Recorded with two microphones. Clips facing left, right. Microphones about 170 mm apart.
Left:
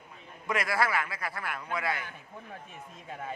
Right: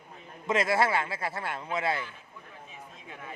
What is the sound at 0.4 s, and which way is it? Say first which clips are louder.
Speech: right 4 dB; 25° right (ahead or behind).